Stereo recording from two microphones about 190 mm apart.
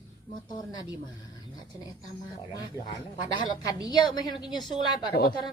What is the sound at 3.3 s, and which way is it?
Speech, 20° left (ahead or behind).